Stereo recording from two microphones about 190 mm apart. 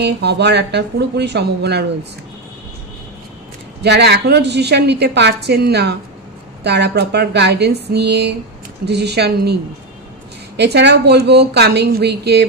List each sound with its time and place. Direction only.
0.0 s a woman's voice: 60° right (ahead or behind)
3.8 s a woman's voice: 60° right (ahead or behind)
10.6 s a woman's voice: 65° right (ahead or behind)